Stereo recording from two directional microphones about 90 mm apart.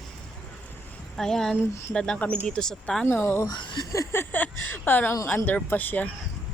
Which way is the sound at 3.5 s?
55° left (ahead or behind).